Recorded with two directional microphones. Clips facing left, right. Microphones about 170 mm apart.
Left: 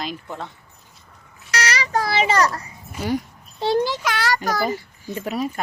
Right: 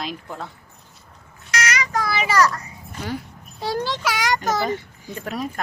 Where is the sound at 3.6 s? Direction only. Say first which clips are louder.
Left 5 dB; 25° left (ahead or behind).